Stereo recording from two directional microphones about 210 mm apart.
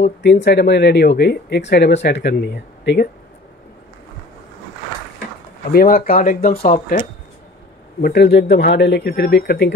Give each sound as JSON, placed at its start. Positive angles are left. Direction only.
{"t": 0.0, "sound": "speech", "side_deg": 55}
{"t": 5.7, "sound": "speech", "side_deg": 45}
{"t": 8.0, "sound": "speech", "side_deg": 50}